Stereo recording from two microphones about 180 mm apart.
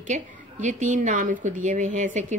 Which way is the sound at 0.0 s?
45° right (ahead or behind).